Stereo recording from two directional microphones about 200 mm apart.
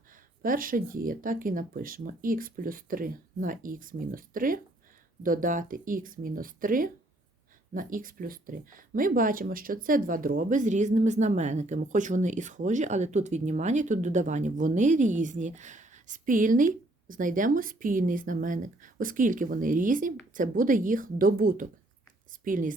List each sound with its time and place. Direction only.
0.4 s a woman's voice: 45° right (ahead or behind)